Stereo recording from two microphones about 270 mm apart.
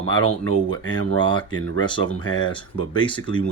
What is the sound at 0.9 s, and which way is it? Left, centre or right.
Speech, centre.